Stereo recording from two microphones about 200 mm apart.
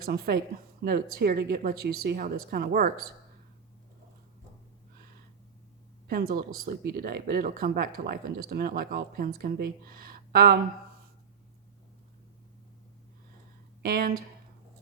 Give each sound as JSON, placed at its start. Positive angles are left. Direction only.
{"t": 0.0, "sound": "a woman's voice", "side_deg": -50}
{"t": 6.1, "sound": "speech", "side_deg": -50}
{"t": 13.8, "sound": "speech", "side_deg": -50}